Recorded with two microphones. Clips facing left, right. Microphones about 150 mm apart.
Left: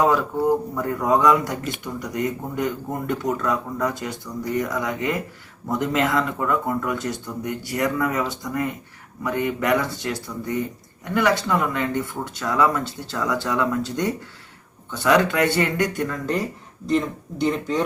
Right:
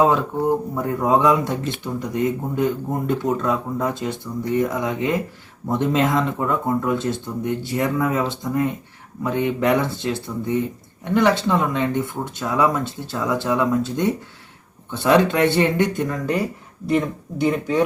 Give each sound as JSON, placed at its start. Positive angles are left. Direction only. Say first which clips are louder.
{"t": 0.0, "sound": "speech", "louder": "right 1 dB", "side_deg": -25}
{"t": 16.0, "sound": "speech", "louder": "right 2 dB", "side_deg": -10}